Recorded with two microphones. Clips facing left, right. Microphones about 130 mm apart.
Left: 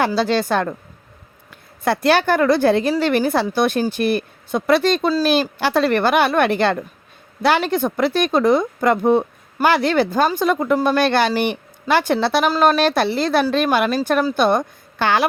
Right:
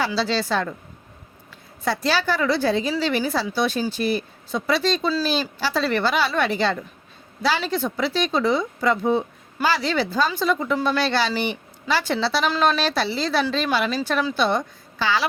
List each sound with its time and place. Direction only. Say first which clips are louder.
0.0 s speech: left 5 dB; 55° left (ahead or behind)
1.8 s a woman's voice: left 6 dB; 55° left (ahead or behind)